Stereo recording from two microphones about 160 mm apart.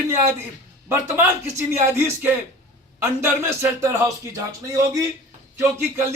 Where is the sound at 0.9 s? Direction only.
15° right (ahead or behind).